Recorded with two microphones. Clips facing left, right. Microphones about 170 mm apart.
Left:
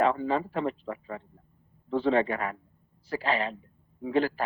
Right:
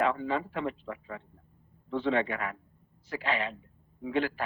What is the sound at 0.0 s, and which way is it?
A man's voice, 35° left (ahead or behind).